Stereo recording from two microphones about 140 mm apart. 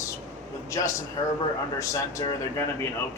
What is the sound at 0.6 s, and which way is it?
Speech, 20° left (ahead or behind).